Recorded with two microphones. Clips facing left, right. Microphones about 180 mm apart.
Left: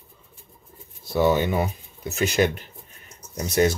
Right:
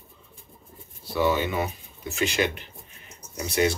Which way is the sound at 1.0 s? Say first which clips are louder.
Left 4 dB; 45° left (ahead or behind).